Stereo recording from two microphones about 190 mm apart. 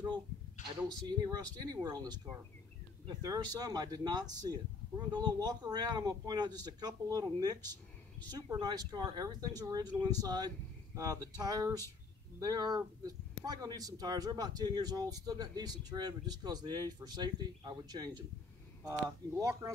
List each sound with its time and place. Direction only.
1.2 s a man's voice: 20° right (ahead or behind)